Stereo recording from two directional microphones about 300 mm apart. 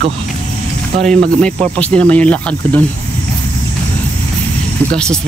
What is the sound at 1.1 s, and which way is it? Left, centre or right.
Speech, centre.